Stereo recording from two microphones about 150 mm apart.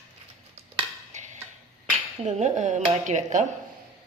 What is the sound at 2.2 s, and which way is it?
Speech, 50° right (ahead or behind).